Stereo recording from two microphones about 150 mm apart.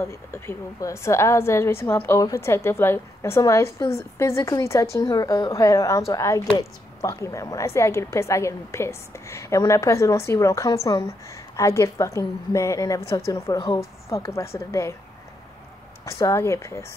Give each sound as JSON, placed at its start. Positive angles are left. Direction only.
{"t": 0.0, "sound": "a woman's voice", "side_deg": 15}
{"t": 16.1, "sound": "a woman's voice", "side_deg": 20}